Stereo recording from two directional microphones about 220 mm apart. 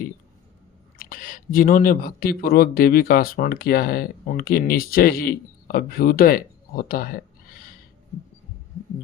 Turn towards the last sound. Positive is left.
turn(degrees=40)  # may be behind; listen again after turning